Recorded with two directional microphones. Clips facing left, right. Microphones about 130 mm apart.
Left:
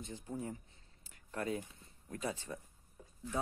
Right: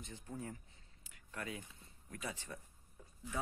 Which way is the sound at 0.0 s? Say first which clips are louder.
Left 4 dB; 25° left (ahead or behind).